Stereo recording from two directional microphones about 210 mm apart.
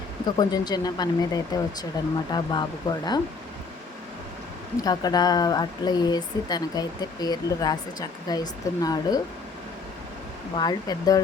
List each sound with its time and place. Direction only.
0.3 s speech: 20° left (ahead or behind)
4.8 s speech: 20° left (ahead or behind)
10.5 s speech: 20° left (ahead or behind)